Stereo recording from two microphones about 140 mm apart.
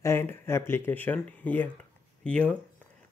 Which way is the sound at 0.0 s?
20° left (ahead or behind).